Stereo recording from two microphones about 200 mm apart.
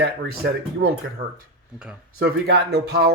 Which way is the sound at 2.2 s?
50° right (ahead or behind).